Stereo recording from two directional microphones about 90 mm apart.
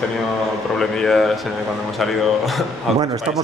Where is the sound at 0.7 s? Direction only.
5° left (ahead or behind).